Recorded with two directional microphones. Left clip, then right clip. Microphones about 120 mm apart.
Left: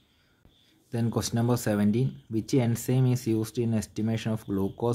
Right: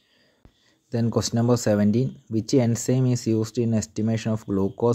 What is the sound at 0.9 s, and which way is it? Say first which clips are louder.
Speech: right 6 dB; 35° right (ahead or behind).